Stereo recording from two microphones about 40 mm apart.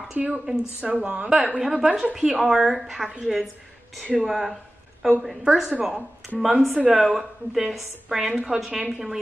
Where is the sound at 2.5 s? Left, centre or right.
Centre.